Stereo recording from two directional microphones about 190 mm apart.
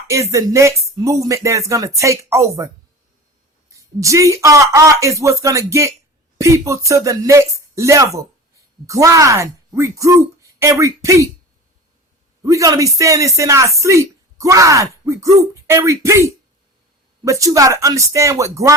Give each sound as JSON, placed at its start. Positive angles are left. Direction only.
{"t": 0.1, "sound": "speech", "side_deg": -15}
{"t": 3.7, "sound": "speech", "side_deg": -15}
{"t": 12.4, "sound": "speech", "side_deg": -20}